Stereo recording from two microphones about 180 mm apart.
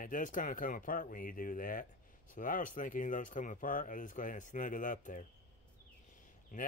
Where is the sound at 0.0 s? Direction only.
45° left (ahead or behind).